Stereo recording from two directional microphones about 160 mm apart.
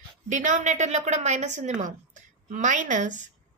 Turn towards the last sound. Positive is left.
turn(degrees=-50)  # may be behind; listen again after turning